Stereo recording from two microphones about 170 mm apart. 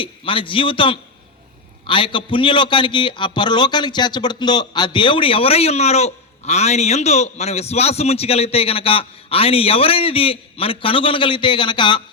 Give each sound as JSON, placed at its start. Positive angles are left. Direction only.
{"t": 0.0, "sound": "a man's voice", "side_deg": 30}